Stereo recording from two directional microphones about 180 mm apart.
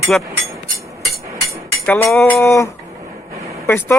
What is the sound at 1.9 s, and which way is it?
Speech, 10° left (ahead or behind).